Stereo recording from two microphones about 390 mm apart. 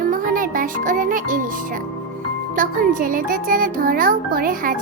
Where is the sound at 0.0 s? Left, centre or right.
Right.